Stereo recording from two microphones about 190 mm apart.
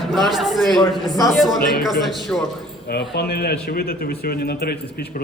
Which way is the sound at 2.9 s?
60° left (ahead or behind).